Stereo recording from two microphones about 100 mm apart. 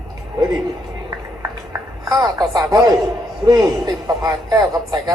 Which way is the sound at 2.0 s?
40° right (ahead or behind).